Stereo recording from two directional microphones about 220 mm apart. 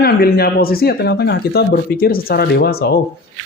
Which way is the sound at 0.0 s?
45° left (ahead or behind).